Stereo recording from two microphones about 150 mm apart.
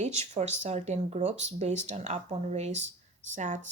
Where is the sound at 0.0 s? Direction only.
50° right (ahead or behind).